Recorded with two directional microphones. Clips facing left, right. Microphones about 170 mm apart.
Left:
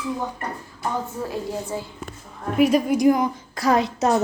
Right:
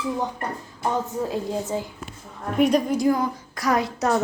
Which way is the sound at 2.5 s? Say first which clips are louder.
Left 1 dB; 5° left (ahead or behind).